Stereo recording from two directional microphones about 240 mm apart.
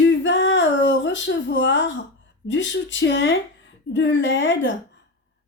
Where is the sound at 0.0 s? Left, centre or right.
Left.